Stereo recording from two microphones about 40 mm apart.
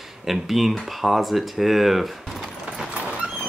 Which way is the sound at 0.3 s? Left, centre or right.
Centre.